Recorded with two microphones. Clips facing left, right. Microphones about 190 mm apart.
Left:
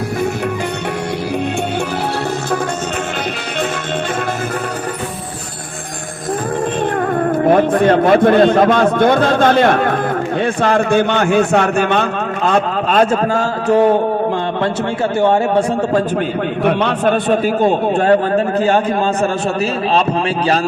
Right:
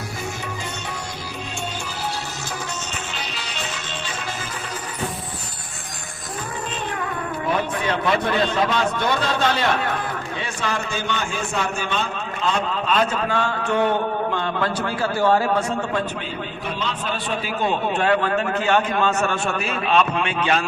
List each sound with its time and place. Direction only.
7.0 s a man's voice: 50° left (ahead or behind)
15.2 s a man's voice: 25° left (ahead or behind)
16.6 s a man's voice: 60° left (ahead or behind); by 20.6 s 35° left (ahead or behind)